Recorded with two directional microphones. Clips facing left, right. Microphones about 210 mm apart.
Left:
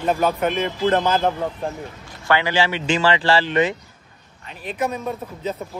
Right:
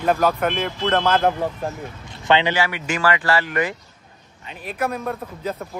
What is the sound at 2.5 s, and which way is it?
Speech, 30° left (ahead or behind).